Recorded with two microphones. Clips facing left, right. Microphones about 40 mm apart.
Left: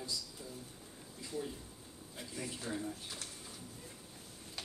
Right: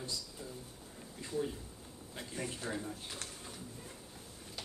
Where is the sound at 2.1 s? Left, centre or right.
Right.